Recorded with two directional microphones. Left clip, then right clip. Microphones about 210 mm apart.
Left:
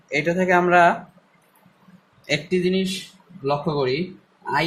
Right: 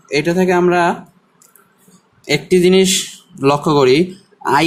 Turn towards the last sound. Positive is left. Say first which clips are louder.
# right 9 dB
turn(degrees=-35)  # may be behind; listen again after turning